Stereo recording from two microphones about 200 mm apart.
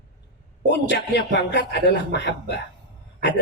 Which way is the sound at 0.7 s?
60° left (ahead or behind).